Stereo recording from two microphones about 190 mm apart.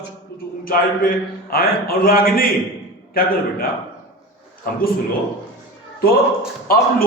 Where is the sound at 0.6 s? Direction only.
50° left (ahead or behind).